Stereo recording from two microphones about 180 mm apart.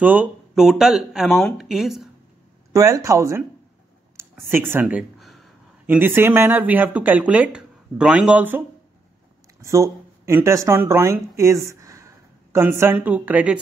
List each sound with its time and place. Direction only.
0.0 s speech: 10° right (ahead or behind)
2.7 s speech: 20° right (ahead or behind)
4.5 s a sound: 10° right (ahead or behind)
5.9 s speech: 10° right (ahead or behind)